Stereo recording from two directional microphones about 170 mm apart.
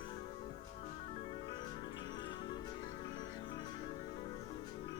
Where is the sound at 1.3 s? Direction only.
25° left (ahead or behind).